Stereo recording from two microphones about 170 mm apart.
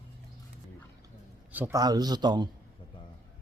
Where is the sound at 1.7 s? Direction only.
25° right (ahead or behind).